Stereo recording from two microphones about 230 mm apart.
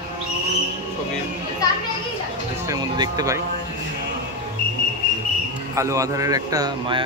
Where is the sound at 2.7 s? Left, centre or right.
Centre.